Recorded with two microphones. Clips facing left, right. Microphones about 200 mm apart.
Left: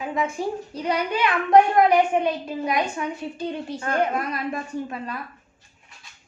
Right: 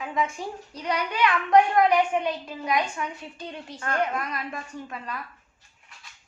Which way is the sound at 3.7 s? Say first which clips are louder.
Left 2 dB; 25° left (ahead or behind).